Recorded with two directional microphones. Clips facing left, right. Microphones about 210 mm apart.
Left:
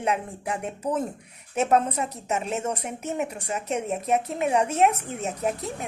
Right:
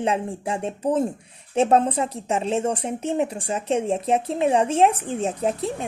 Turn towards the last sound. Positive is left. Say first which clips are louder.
# right 4 dB
turn(degrees=-30)  # may be behind; listen again after turning